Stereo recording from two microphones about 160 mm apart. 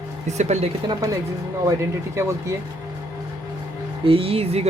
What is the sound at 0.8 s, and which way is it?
Speech, 20° right (ahead or behind).